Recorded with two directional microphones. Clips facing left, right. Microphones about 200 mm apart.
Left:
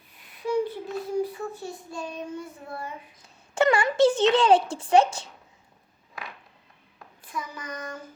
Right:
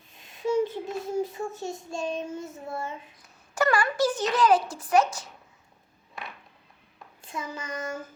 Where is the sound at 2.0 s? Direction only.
25° right (ahead or behind).